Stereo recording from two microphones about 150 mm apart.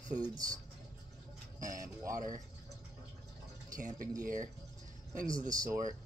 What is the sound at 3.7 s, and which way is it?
Speech, 60° right (ahead or behind).